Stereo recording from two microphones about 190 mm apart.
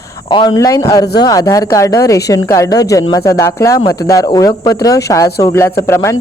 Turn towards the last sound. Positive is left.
turn(degrees=15)  # may be behind; listen again after turning